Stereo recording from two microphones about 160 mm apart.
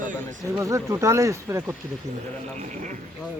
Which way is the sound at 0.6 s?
20° right (ahead or behind).